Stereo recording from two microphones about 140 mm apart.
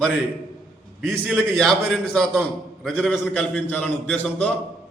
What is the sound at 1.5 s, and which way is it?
A man's voice, 5° left (ahead or behind).